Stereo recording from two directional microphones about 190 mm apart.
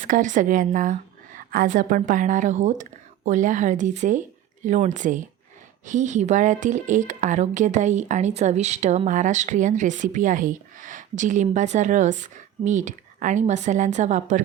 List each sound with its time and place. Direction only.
0.1 s a woman's voice: 40° right (ahead or behind)